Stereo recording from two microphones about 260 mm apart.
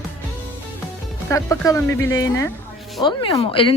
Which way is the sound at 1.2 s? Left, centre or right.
Centre.